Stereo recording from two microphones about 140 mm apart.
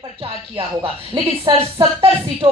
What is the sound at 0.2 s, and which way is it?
Speech, 35° right (ahead or behind).